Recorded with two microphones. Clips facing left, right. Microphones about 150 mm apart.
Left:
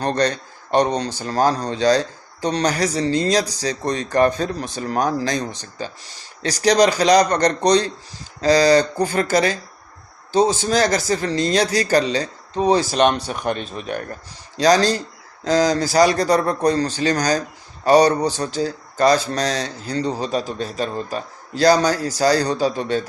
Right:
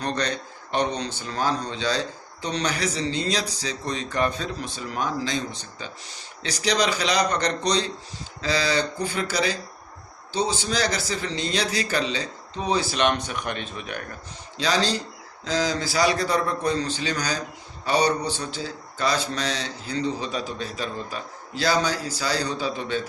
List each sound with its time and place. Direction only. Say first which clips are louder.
0.2 s a man's voice: left 7 dB; 40° left (ahead or behind)